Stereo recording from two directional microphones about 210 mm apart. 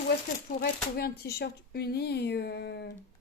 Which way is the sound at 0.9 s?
50° left (ahead or behind).